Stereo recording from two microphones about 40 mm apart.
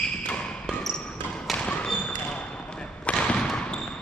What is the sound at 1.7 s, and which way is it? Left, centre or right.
Basketball bounce, left.